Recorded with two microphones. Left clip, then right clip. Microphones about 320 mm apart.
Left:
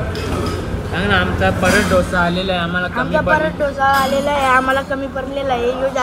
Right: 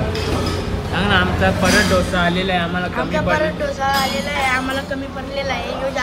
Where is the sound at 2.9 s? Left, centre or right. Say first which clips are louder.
Left 3 dB; centre.